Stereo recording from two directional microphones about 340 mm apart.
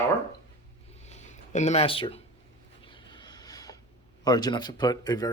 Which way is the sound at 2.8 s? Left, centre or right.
Centre.